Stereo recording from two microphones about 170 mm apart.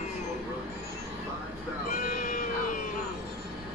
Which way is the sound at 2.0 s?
55° left (ahead or behind).